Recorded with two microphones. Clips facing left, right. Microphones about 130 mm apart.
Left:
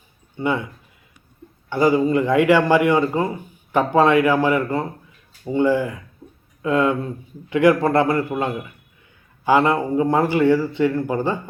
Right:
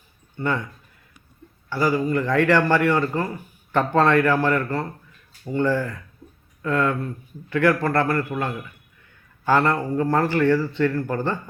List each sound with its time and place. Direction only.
0.3 s a man's voice: 15° left (ahead or behind)
1.7 s a man's voice: 20° left (ahead or behind)
6.2 s a sound: 20° left (ahead or behind)
6.6 s a man's voice: 15° left (ahead or behind)